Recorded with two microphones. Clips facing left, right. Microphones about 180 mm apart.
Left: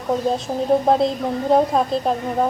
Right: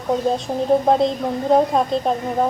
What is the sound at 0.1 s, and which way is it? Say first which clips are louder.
A woman's voice: right 1 dB; centre (ahead or behind).